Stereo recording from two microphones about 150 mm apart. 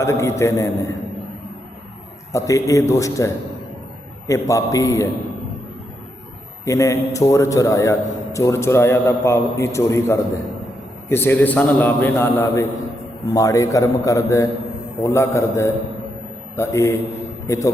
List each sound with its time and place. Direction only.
0.0 s a man's voice: 20° left (ahead or behind)
2.3 s a man's voice: 20° left (ahead or behind)
6.7 s a man's voice: 20° left (ahead or behind)